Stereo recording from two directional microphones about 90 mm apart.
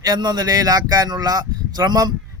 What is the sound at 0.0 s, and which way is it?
A man's voice, 50° right (ahead or behind).